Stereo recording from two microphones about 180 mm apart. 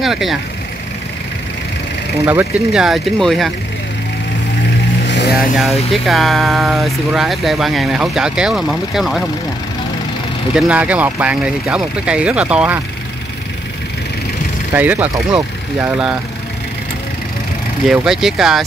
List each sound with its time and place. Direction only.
0.0 s speech: centre (ahead or behind)
2.2 s speech: 5° right (ahead or behind)
5.0 s vehicle: 75° left (ahead or behind)
5.9 s speech: centre (ahead or behind)
10.5 s speech: 10° right (ahead or behind)
14.7 s speech: 10° right (ahead or behind)
17.8 s speech: 5° right (ahead or behind)